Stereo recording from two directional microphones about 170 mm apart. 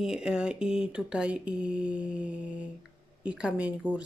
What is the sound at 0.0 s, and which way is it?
Speech, 5° right (ahead or behind).